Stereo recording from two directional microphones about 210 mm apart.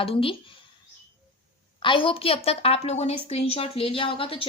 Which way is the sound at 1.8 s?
25° left (ahead or behind).